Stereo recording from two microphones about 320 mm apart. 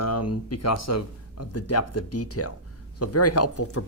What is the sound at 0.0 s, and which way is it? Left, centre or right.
Speech, left.